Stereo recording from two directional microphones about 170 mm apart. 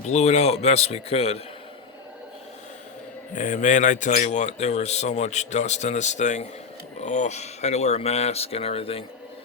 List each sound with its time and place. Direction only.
0.1 s speech: 40° left (ahead or behind)
3.3 s speech: 50° left (ahead or behind)